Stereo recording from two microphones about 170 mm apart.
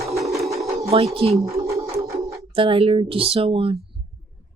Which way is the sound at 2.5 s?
30° right (ahead or behind).